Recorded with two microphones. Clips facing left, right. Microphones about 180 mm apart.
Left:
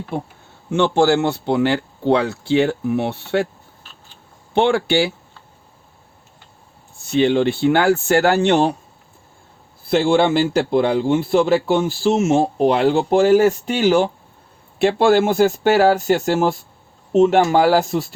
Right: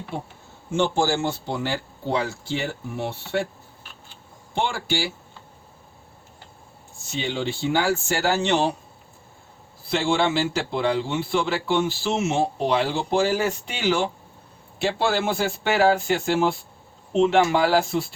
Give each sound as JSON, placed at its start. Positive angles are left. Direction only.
{"t": 0.7, "sound": "speech", "side_deg": 65}
{"t": 4.5, "sound": "speech", "side_deg": 65}
{"t": 7.0, "sound": "speech", "side_deg": 60}
{"t": 9.9, "sound": "a man's voice", "side_deg": 50}